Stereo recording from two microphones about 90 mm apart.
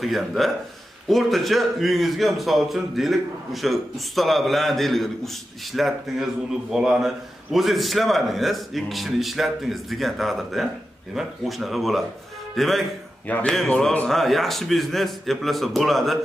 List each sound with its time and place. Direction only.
0.0 s a man's voice: centre (ahead or behind)
13.3 s a man's voice: 20° left (ahead or behind); by 16.2 s centre (ahead or behind)